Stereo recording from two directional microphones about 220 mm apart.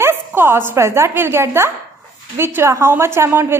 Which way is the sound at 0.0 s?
10° right (ahead or behind).